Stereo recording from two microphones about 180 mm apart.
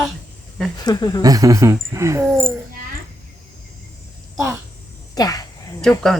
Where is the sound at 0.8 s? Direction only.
20° left (ahead or behind).